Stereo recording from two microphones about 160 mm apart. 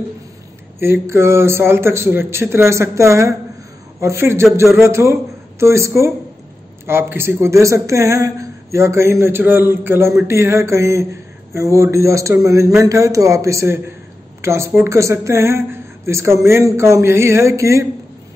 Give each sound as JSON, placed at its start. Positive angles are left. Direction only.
{"t": 0.7, "sound": "speech", "side_deg": -15}